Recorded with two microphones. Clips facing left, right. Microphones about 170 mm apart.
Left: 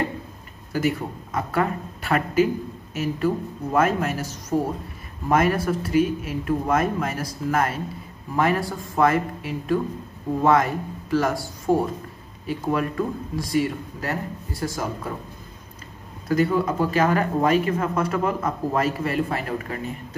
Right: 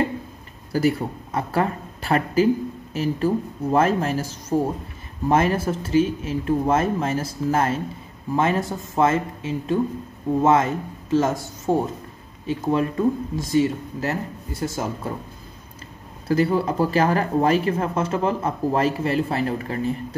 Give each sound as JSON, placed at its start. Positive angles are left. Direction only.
{"t": 0.7, "sound": "speech", "side_deg": -35}
{"t": 16.3, "sound": "speech", "side_deg": -30}